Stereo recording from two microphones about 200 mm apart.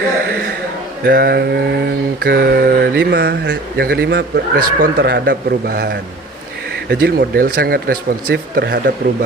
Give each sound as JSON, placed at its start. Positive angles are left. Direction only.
{"t": 1.0, "sound": "mantra", "side_deg": -50}